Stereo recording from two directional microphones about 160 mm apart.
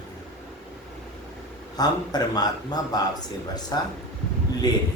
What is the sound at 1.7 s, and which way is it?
Speech, 25° left (ahead or behind).